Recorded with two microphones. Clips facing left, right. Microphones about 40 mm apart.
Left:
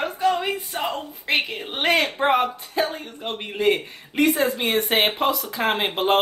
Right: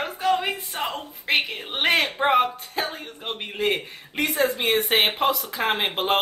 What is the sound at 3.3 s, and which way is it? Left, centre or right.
Speech, centre.